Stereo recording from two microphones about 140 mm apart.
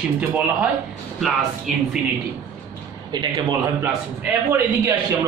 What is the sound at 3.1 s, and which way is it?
A man's voice, 25° right (ahead or behind).